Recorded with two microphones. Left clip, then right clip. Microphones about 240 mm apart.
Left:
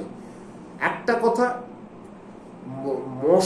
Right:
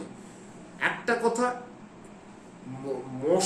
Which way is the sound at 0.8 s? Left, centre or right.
Centre.